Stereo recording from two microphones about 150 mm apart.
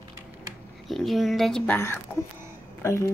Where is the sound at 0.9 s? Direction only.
Centre (ahead or behind).